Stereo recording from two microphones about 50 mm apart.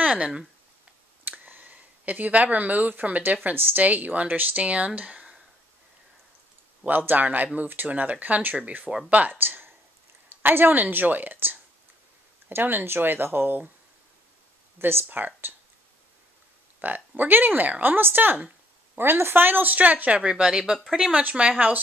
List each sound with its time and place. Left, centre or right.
0.1 s speech: centre
1.4 s speech: right
6.9 s speech: right
9.3 s speech: right
14.8 s speech: right
15.0 s speech: right
16.8 s speech: right
20.2 s speech: centre
21.1 s speech: right